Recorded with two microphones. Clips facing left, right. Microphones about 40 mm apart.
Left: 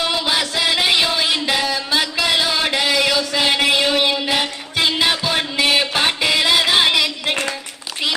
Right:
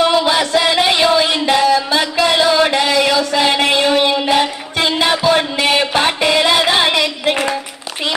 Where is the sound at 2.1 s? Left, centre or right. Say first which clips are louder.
Right 6 dB; centre.